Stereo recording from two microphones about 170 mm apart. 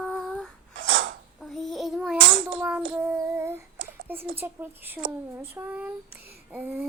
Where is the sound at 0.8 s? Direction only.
90° right.